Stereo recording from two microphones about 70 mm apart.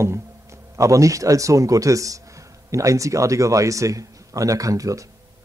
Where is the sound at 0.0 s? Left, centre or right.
Right.